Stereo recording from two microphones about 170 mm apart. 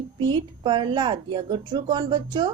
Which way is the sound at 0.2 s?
25° right (ahead or behind).